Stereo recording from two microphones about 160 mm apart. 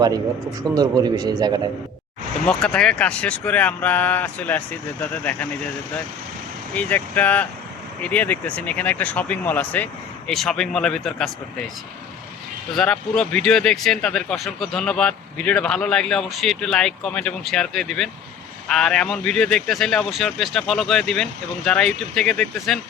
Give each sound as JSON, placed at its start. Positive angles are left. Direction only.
{"t": 0.7, "sound": "a man's voice", "side_deg": -25}
{"t": 2.5, "sound": "speech", "side_deg": 5}
{"t": 6.7, "sound": "speech", "side_deg": 10}
{"t": 12.7, "sound": "speech", "side_deg": 5}